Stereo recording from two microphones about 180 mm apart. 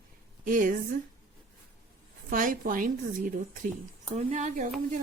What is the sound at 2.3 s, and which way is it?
Speech, 50° right (ahead or behind).